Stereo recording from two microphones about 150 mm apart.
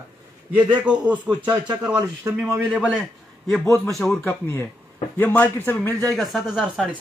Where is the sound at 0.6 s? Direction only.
10° right (ahead or behind).